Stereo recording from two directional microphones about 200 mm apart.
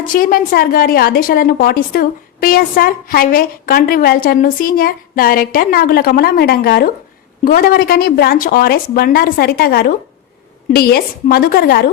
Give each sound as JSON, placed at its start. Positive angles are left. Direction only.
{"t": 0.1, "sound": "a woman's voice", "side_deg": 45}